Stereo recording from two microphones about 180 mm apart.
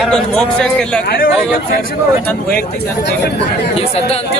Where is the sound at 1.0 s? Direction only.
55° left (ahead or behind).